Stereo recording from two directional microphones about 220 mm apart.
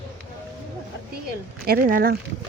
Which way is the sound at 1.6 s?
40° right (ahead or behind).